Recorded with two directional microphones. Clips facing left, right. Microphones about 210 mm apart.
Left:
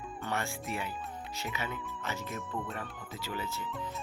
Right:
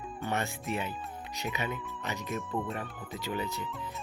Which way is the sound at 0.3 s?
20° right (ahead or behind).